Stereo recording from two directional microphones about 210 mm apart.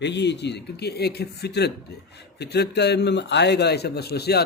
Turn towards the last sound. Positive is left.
turn(degrees=50)  # may be behind; listen again after turning